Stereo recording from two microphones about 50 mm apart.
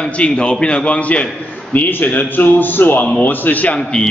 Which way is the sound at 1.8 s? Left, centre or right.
Left.